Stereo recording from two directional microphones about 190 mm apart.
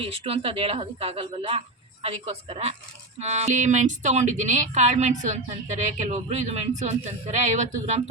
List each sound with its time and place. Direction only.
0.0 s speech: 30° right (ahead or behind)